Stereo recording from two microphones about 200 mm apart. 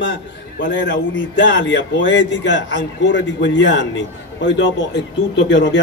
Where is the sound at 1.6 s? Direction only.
70° left (ahead or behind).